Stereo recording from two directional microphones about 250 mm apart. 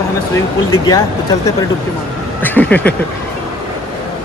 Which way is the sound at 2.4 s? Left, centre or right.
Centre.